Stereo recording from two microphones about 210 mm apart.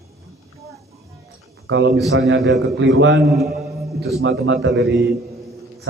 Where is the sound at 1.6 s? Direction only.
60° right (ahead or behind).